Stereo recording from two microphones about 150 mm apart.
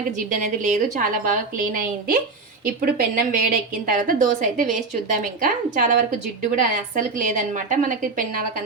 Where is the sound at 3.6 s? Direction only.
65° right (ahead or behind).